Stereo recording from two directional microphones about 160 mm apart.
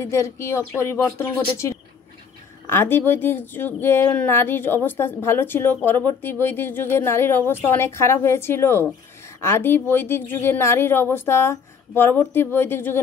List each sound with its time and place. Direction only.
0.0 s a woman's voice: 15° left (ahead or behind)